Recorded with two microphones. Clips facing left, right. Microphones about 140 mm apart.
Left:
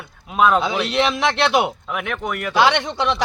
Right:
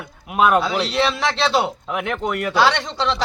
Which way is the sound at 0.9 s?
15° left (ahead or behind).